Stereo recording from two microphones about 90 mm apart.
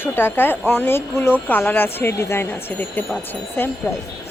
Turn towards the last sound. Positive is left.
turn(degrees=25)  # may be behind; listen again after turning